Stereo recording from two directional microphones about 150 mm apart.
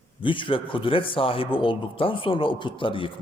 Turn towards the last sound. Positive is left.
turn(degrees=35)  # may be behind; listen again after turning